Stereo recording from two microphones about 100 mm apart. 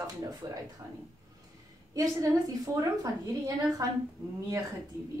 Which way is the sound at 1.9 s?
35° right (ahead or behind).